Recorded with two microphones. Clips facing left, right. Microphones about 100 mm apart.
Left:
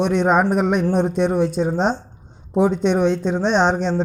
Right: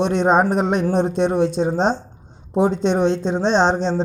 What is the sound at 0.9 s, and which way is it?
Speech, 5° left (ahead or behind).